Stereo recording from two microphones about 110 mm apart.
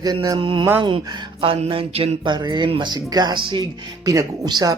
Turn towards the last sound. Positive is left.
turn(degrees=-35)  # may be behind; listen again after turning